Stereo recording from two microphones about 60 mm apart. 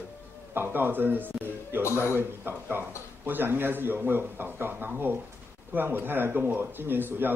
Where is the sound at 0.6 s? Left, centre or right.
Right.